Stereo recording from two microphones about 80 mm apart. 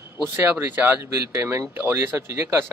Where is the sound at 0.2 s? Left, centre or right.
Right.